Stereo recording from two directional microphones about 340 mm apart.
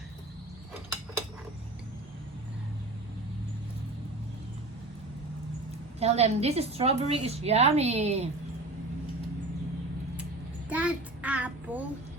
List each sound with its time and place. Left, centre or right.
6.0 s a woman's voice: centre
10.7 s child singing: centre